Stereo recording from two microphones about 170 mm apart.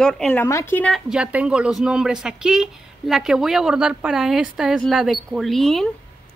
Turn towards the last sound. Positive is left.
turn(degrees=0)  # may be behind; listen again after turning